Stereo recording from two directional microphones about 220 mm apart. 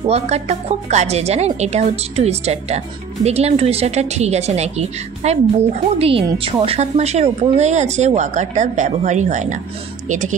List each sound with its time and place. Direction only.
0.0 s a woman's voice: 30° right (ahead or behind)